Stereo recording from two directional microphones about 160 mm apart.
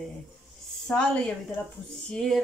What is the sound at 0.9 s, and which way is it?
Speech, 10° left (ahead or behind).